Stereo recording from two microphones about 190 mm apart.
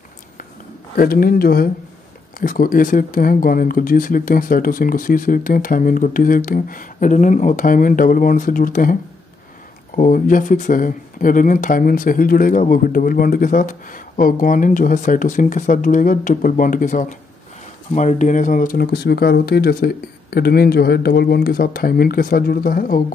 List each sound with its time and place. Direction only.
0.9 s speech: 50° left (ahead or behind)
9.9 s speech: 45° left (ahead or behind)